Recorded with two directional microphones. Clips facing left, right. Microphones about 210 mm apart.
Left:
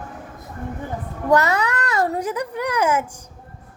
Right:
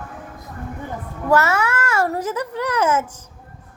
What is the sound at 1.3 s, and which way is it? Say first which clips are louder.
A child's voice: even; 15° left (ahead or behind).